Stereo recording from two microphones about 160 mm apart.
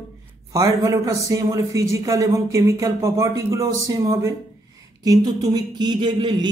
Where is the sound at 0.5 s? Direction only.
20° right (ahead or behind).